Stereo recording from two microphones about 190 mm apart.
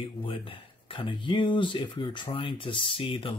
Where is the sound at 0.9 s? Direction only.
25° left (ahead or behind).